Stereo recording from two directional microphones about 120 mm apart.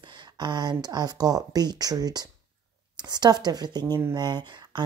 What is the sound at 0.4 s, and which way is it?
Speech, 35° right (ahead or behind).